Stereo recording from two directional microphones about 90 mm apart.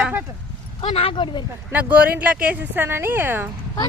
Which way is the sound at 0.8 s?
90° left.